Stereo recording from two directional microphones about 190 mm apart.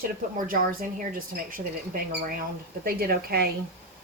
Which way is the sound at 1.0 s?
45° right (ahead or behind).